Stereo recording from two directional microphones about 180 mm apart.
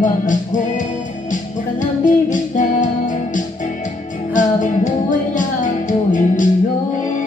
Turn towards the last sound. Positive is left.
turn(degrees=45)  # may be behind; listen again after turning